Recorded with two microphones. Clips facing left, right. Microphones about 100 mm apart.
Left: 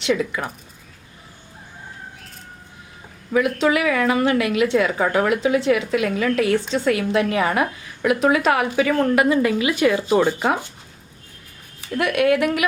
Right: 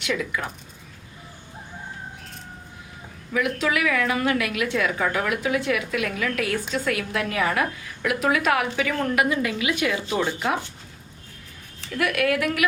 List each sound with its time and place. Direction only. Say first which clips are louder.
0.0 s a woman's voice: left 5 dB; 30° left (ahead or behind)
3.3 s a woman's voice: left 6 dB; 25° left (ahead or behind)
10.2 s speech: left 6 dB; 50° left (ahead or behind)
11.9 s a woman's voice: left 5 dB; 25° left (ahead or behind)